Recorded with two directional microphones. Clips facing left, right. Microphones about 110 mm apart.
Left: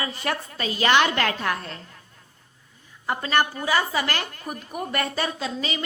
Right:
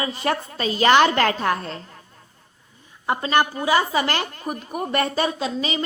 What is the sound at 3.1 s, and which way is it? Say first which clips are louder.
A woman's voice: right 3 dB; 20° right (ahead or behind).